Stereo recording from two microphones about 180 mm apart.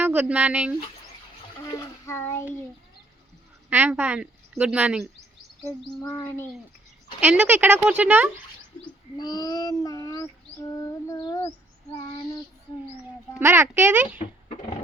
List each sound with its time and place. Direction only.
0.0 s speech: 10° right (ahead or behind)
1.6 s a child's voice: 15° left (ahead or behind)
3.7 s a woman's voice: 10° right (ahead or behind)
6.0 s bird: 20° left (ahead or behind)
7.2 s a woman's voice: 10° right (ahead or behind)
9.1 s child singing: 20° left (ahead or behind)
13.4 s a woman's voice: 15° right (ahead or behind)